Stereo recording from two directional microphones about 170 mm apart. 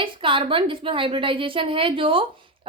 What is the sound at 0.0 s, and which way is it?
A woman's voice, 30° right (ahead or behind).